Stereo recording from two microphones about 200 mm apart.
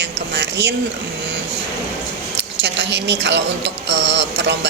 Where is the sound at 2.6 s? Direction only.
60° right (ahead or behind).